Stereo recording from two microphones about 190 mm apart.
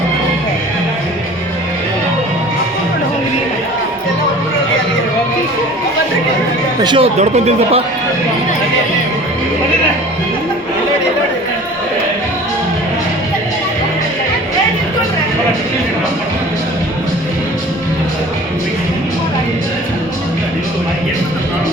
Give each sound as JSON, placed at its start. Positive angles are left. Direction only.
{"t": 6.8, "sound": "speech", "side_deg": -30}